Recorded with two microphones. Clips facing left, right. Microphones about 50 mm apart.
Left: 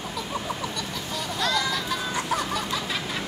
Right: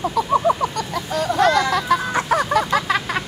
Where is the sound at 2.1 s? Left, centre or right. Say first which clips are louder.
Right 9 dB; right.